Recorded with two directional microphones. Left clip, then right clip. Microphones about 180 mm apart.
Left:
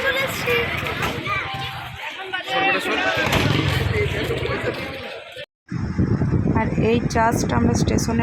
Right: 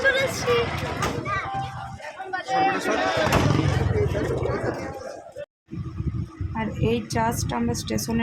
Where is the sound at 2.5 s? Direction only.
55° right (ahead or behind).